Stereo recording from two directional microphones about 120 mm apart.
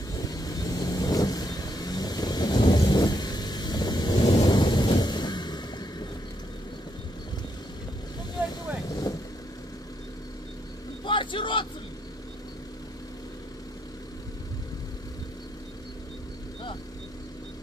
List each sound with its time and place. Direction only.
0.1 s vehicle: 30° left (ahead or behind)
8.8 s vehicle: 30° left (ahead or behind)
11.1 s vehicle: 45° left (ahead or behind)